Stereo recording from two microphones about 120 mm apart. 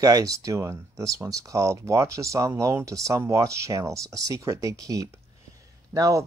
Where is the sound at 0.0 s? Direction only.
30° right (ahead or behind).